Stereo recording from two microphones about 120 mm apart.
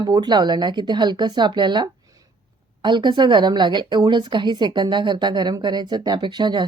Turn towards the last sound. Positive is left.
turn(degrees=-40)  # may be behind; listen again after turning